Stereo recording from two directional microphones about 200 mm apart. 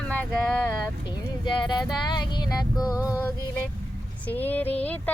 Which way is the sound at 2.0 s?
20° left (ahead or behind).